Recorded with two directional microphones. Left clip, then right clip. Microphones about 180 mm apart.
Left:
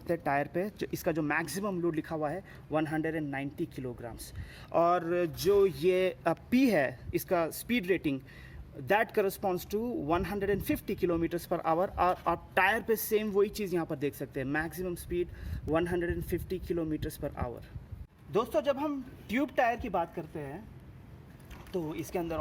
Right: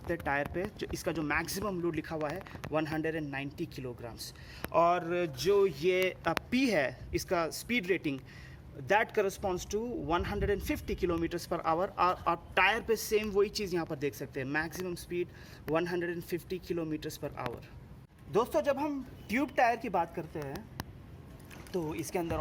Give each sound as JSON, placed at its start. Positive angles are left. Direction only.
{"t": 0.1, "sound": "speech", "side_deg": 60}
{"t": 4.7, "sound": "speech", "side_deg": 60}
{"t": 18.3, "sound": "speech", "side_deg": 30}
{"t": 21.8, "sound": "speech", "side_deg": 35}